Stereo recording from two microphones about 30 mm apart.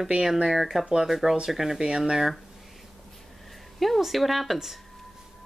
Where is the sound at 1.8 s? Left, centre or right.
Right.